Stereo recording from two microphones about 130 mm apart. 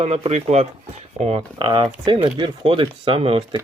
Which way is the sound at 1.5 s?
40° right (ahead or behind).